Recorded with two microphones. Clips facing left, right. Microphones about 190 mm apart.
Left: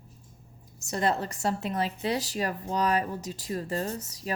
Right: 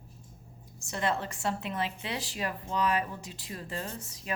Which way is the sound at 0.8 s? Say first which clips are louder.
Left 4 dB; 40° left (ahead or behind).